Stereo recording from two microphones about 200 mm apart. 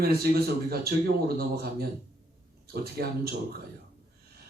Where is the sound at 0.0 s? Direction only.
50° right (ahead or behind).